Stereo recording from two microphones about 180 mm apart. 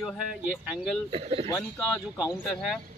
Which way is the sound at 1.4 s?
20° left (ahead or behind).